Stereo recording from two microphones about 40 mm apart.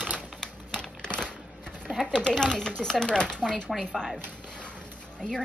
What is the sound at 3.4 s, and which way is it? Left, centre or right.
Speech, centre.